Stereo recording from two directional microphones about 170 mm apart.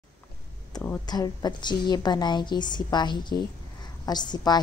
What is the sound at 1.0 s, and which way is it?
A woman's voice, 25° left (ahead or behind).